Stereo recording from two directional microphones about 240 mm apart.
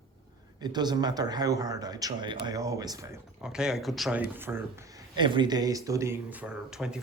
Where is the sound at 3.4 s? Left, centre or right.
Centre.